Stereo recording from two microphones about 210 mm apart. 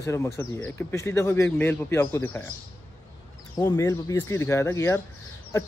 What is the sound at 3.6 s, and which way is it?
Speech, 15° left (ahead or behind).